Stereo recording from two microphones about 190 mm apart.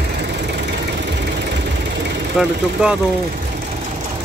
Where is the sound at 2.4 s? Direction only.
5° right (ahead or behind).